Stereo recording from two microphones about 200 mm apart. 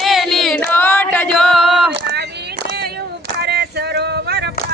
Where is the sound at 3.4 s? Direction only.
55° right (ahead or behind).